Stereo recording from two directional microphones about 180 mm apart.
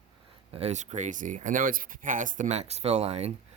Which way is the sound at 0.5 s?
40° right (ahead or behind).